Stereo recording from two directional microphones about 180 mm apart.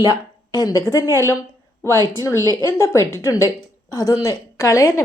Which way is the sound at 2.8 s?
15° left (ahead or behind).